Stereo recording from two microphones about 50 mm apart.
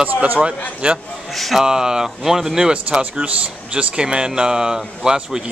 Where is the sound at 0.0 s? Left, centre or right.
Right.